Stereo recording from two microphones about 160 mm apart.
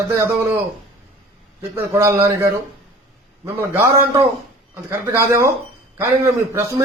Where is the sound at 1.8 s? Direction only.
15° right (ahead or behind).